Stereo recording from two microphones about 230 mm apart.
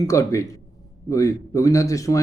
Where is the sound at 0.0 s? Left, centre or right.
Centre.